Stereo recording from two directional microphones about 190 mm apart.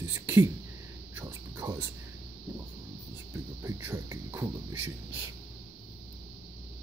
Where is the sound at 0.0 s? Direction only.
10° right (ahead or behind).